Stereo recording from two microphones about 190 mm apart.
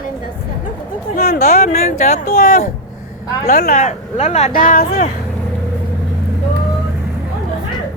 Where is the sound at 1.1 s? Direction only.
50° left (ahead or behind).